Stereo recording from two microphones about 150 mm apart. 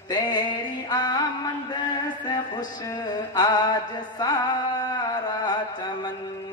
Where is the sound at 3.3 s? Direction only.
30° left (ahead or behind).